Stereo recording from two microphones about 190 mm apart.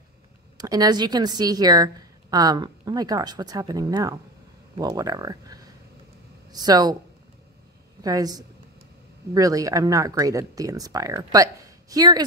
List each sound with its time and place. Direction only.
0.6 s a woman's voice: 20° right (ahead or behind)
8.0 s a woman's voice: 20° right (ahead or behind)